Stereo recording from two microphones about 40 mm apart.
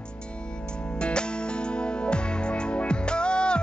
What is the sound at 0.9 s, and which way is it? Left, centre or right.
Music, left.